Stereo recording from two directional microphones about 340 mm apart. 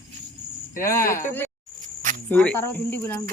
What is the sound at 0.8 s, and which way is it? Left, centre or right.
Cricket, centre.